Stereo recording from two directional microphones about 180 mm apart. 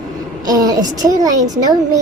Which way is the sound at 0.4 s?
20° right (ahead or behind).